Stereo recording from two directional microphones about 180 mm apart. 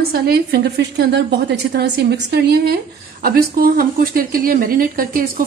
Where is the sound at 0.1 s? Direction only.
60° right (ahead or behind).